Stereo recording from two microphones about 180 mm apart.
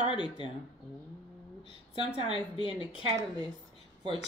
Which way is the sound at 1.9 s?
30° left (ahead or behind).